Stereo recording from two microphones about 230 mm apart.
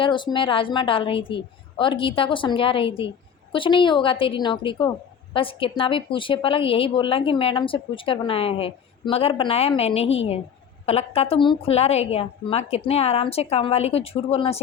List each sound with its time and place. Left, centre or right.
0.0 s a woman's voice: left